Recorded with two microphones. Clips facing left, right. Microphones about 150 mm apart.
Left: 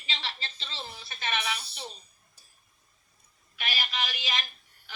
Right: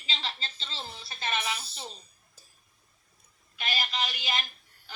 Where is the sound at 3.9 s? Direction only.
30° right (ahead or behind).